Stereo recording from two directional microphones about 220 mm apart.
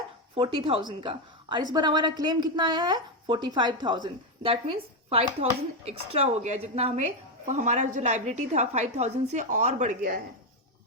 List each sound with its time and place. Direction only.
0.3 s a woman's voice: 25° right (ahead or behind)